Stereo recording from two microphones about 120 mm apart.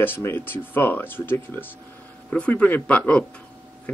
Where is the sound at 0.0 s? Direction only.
20° left (ahead or behind).